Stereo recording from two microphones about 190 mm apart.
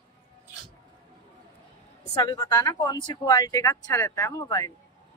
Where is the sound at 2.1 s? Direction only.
20° left (ahead or behind).